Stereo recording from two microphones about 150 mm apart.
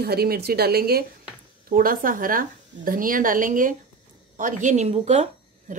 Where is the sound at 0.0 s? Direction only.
90° right.